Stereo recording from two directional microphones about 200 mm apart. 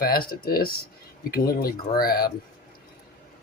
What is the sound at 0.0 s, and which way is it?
Speech, 45° left (ahead or behind).